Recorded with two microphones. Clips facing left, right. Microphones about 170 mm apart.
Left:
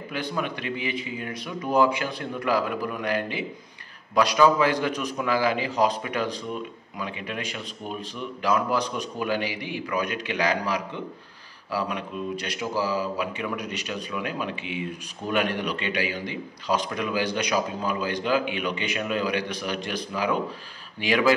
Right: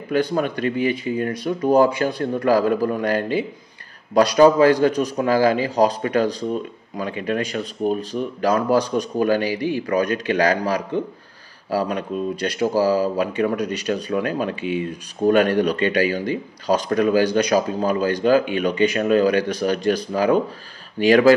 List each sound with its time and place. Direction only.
0.1 s a man's voice: 40° right (ahead or behind)
12.1 s a man's voice: 35° right (ahead or behind)